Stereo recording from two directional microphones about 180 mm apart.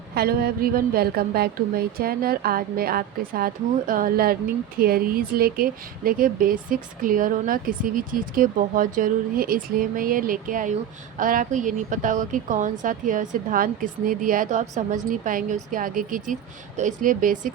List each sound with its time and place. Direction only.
0.1 s a woman's voice: 60° right (ahead or behind)